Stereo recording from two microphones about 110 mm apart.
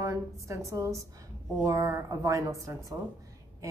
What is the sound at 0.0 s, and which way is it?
A woman's voice, 30° right (ahead or behind).